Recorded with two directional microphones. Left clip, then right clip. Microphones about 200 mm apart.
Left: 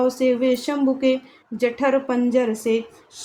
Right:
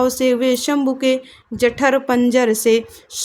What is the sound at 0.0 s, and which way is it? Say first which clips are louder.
Speech: right 3 dB; 40° right (ahead or behind).